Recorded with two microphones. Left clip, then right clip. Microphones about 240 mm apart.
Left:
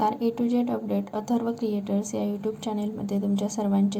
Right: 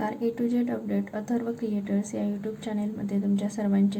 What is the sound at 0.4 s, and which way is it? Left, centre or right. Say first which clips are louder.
A woman's voice: left 2 dB; left.